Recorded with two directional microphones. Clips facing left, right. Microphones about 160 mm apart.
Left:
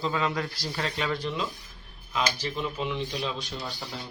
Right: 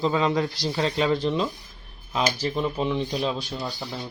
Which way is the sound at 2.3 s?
40° right (ahead or behind).